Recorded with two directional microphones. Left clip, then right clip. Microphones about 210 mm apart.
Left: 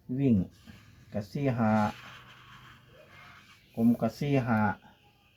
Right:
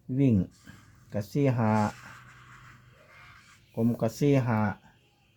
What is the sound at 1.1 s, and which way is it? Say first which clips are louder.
Speech: right 4 dB; 55° right (ahead or behind).